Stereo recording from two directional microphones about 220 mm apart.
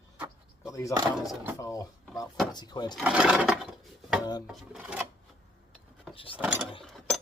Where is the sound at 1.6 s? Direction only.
15° left (ahead or behind).